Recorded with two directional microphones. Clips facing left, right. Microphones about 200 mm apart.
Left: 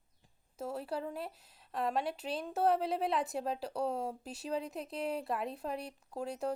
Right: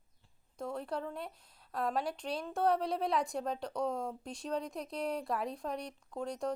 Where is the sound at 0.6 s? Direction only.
5° left (ahead or behind).